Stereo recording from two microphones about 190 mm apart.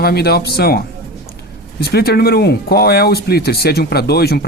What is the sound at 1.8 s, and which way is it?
Speech, 55° left (ahead or behind).